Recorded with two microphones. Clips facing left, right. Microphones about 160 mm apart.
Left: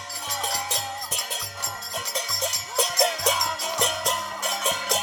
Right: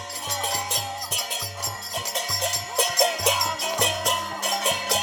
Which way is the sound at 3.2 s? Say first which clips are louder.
Right 1 dB; 15° right (ahead or behind).